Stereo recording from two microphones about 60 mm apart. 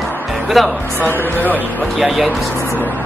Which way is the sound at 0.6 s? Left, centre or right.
Centre.